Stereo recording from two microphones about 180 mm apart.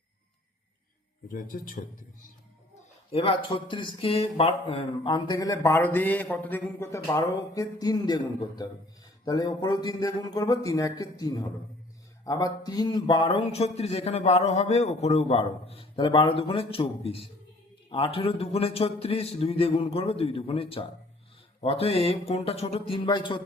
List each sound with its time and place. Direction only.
1.3 s speech: 50° left (ahead or behind)
3.1 s a man's voice: 30° left (ahead or behind)